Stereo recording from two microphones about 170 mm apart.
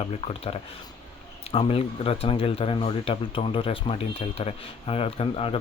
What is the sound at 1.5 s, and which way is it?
Speech, 35° left (ahead or behind).